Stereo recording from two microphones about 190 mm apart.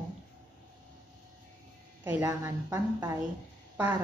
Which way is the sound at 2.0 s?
15° right (ahead or behind).